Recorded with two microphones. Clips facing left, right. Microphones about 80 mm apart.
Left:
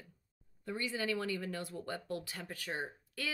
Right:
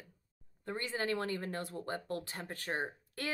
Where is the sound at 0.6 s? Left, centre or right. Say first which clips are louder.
Right 1 dB; right.